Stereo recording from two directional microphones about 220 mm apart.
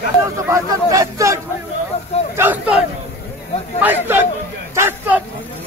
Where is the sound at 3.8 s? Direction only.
10° right (ahead or behind).